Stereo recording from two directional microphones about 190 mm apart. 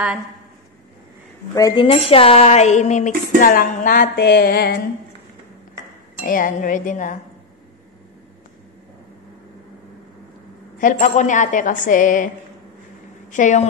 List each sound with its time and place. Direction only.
1.5 s a woman's voice: 20° left (ahead or behind)
1.9 s speech: 30° left (ahead or behind); by 4.7 s 55° left (ahead or behind)
6.2 s a woman's voice: 45° left (ahead or behind)
10.8 s a woman's voice: 45° left (ahead or behind)
13.3 s speech: 40° left (ahead or behind)